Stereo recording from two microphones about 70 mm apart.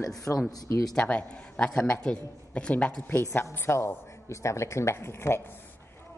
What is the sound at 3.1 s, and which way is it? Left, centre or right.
A woman's voice, left.